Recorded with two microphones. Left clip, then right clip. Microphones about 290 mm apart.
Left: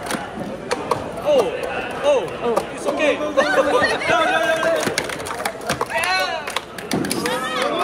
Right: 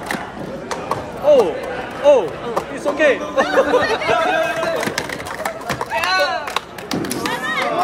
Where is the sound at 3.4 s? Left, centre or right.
Right.